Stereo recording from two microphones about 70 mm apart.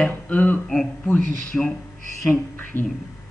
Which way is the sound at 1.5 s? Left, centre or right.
Centre.